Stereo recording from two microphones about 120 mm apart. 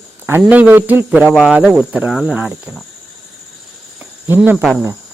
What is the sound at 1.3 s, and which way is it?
A man's voice, centre (ahead or behind).